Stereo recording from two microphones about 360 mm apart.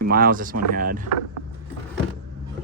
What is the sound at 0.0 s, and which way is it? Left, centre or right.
Speech, right.